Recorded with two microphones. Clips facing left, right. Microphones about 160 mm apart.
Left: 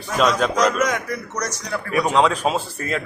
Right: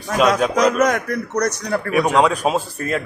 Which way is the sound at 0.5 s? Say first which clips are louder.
Right 3 dB; 55° right (ahead or behind).